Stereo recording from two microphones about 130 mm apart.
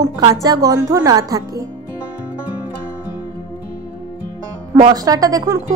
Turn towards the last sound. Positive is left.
turn(degrees=-30)  # may be behind; listen again after turning